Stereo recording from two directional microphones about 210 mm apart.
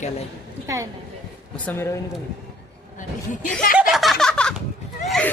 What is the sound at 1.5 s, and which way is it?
Speech, 10° left (ahead or behind).